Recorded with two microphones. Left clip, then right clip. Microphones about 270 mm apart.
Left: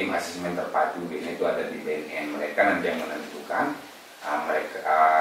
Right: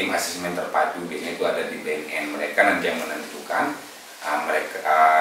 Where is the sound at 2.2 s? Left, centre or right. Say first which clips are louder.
Right 3 dB; centre.